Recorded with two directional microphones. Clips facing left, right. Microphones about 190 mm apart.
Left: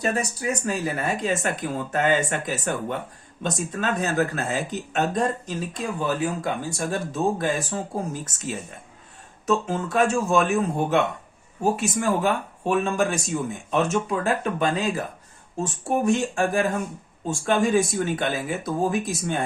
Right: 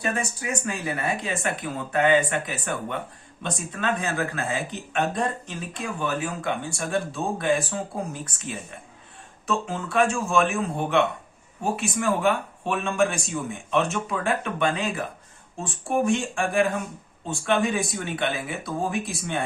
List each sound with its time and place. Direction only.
0.0 s speech: 40° left (ahead or behind)